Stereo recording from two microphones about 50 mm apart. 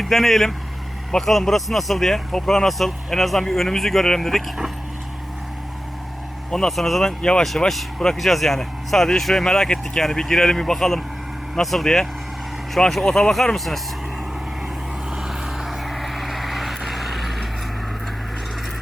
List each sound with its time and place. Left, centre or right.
0.0 s speech: centre
6.5 s speech: centre
7.2 s speech: centre
7.7 s speech: centre
13.1 s speech: centre
15.1 s vehicle: centre